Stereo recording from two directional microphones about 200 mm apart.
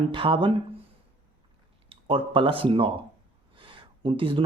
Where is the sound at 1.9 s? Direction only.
25° right (ahead or behind).